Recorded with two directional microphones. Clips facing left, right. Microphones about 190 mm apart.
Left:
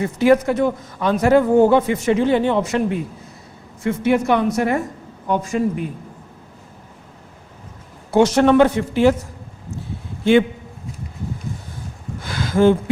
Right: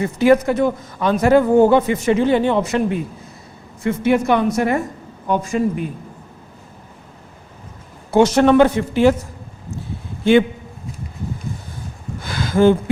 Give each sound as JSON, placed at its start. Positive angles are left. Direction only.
{"t": 0.0, "sound": "a woman's voice", "side_deg": -15}
{"t": 8.1, "sound": "speech", "side_deg": -10}
{"t": 12.2, "sound": "a sound", "side_deg": -15}